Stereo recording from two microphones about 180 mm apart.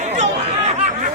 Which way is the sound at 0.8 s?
40° right (ahead or behind).